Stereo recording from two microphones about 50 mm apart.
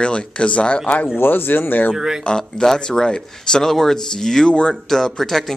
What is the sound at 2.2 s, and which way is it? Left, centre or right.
Speech, centre.